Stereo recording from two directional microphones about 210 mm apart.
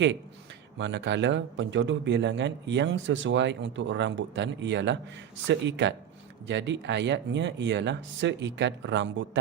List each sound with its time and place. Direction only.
0.8 s speech: 55° right (ahead or behind)